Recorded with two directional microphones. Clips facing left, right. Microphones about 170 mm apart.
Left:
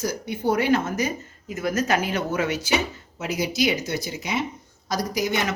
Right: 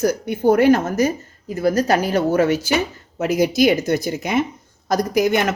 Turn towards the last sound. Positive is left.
turn(degrees=-55)  # may be behind; listen again after turning